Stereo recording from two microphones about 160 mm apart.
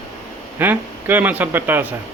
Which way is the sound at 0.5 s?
10° right (ahead or behind).